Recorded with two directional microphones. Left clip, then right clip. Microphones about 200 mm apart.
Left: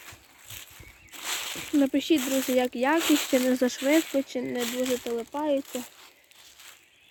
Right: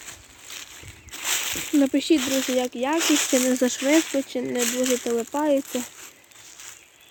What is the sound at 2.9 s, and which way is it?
Speech, centre (ahead or behind).